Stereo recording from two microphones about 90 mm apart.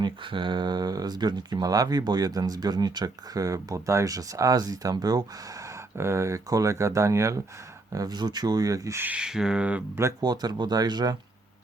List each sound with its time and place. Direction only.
0.0 s speech: 60° right (ahead or behind)
6.0 s speech: 30° right (ahead or behind)
7.9 s speech: 50° right (ahead or behind)
9.0 s speech: 15° right (ahead or behind)
10.2 s speech: 50° right (ahead or behind)